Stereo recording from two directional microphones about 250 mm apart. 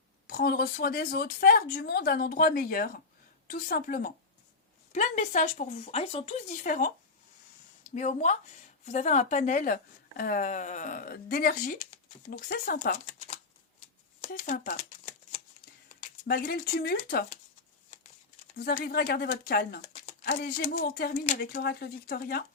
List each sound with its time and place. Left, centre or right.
0.3 s speech: left
7.9 s speech: left
12.3 s shuffling cards: left
16.2 s speech: left
18.5 s speech: left